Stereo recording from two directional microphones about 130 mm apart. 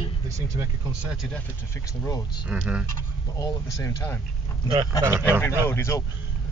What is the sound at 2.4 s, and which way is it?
Speech, 10° right (ahead or behind).